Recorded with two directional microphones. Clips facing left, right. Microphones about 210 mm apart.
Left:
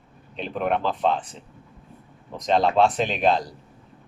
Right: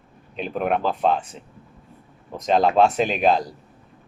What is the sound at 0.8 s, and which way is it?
Speech, 45° right (ahead or behind).